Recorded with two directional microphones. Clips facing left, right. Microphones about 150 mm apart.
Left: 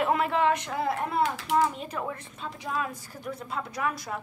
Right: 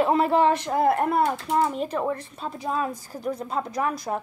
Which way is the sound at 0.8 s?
55° right (ahead or behind).